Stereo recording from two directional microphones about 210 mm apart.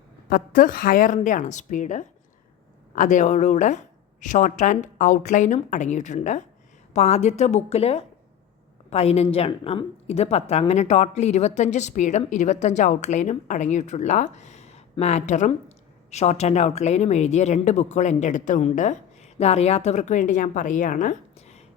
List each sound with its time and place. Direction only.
0.3 s a woman's voice: 40° left (ahead or behind)